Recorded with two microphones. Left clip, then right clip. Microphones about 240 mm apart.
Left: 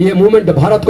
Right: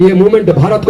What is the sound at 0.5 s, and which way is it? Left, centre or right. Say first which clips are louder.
Speech: left 1 dB; left.